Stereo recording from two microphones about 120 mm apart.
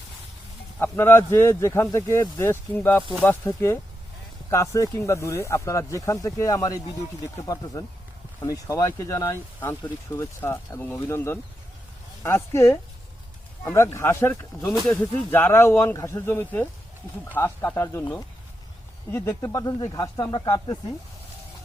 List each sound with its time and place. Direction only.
0.8 s speech: 15° left (ahead or behind); by 20.7 s 35° left (ahead or behind)